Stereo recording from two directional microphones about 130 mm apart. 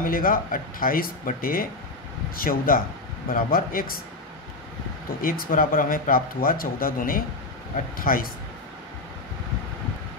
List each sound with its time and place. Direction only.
0.0 s speech: 90° left
5.2 s speech: 90° left